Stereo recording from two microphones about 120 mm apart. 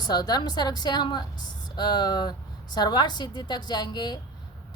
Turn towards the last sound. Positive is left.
turn(degrees=35)  # may be behind; listen again after turning